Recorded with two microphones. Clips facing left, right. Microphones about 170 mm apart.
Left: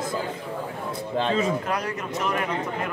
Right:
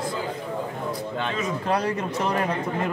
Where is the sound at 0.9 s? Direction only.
30° left (ahead or behind).